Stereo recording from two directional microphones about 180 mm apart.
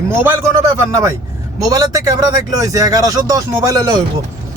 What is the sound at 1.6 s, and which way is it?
Speech, 20° right (ahead or behind).